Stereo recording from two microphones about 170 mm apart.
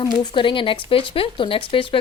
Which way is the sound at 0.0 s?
25° left (ahead or behind).